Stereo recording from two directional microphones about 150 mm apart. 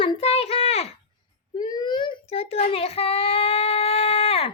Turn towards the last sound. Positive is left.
turn(degrees=40)  # may be behind; listen again after turning